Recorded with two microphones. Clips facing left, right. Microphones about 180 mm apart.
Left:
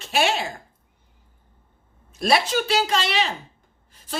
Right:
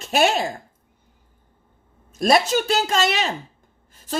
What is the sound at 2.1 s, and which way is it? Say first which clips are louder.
A woman's voice: right 3 dB; 45° right (ahead or behind).